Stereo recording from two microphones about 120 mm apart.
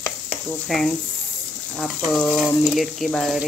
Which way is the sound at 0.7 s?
Centre (ahead or behind).